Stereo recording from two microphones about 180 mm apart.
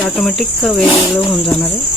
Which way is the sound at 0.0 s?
Centre (ahead or behind).